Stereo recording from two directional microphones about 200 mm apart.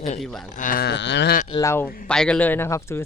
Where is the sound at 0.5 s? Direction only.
40° left (ahead or behind); by 1.4 s 60° left (ahead or behind).